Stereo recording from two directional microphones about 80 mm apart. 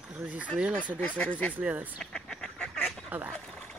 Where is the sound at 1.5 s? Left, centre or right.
Centre.